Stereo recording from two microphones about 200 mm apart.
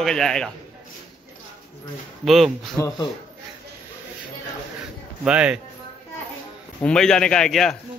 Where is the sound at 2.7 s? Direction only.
15° left (ahead or behind).